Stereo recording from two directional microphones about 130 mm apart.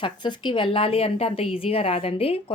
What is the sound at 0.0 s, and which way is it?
Speech, 35° left (ahead or behind).